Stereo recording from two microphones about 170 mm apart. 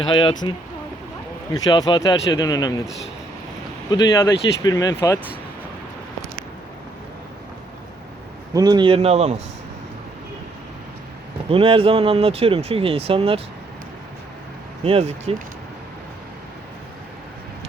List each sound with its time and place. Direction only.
0.0 s speech: 30° left (ahead or behind)
1.5 s speech: 25° left (ahead or behind)
3.9 s speech: 20° left (ahead or behind)
8.5 s speech: 25° right (ahead or behind)
11.4 s speech: 35° right (ahead or behind)
14.8 s speech: 35° right (ahead or behind)